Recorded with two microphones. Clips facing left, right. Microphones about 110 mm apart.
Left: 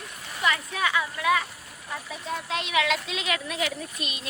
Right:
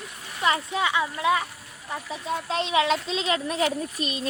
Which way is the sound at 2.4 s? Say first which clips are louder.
Right 3 dB; 30° right (ahead or behind).